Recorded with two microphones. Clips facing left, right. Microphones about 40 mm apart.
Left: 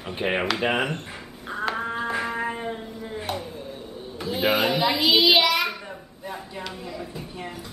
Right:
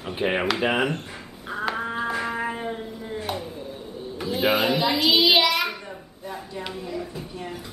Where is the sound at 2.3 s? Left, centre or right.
Centre.